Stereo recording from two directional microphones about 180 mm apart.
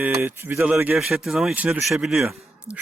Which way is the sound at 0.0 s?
10° right (ahead or behind).